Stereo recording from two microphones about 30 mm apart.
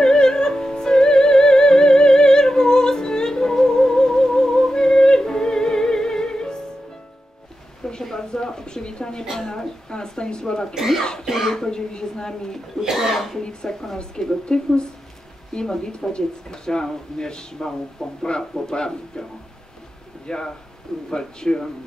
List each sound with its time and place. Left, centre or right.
0.0 s music: left
8.0 s a sound: centre
10.4 s speech: left
10.7 s speech: centre
11.5 s speech: left; by 13.4 s centre
13.4 s speech: left
15.5 s speech: left
20.2 s speech: left